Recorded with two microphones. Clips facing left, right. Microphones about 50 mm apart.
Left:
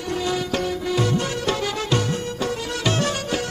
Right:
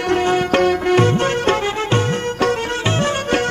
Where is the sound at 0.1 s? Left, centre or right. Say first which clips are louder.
Right 8 dB; right.